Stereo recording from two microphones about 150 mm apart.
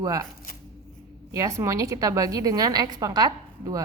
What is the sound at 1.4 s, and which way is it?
A woman's voice, 20° right (ahead or behind).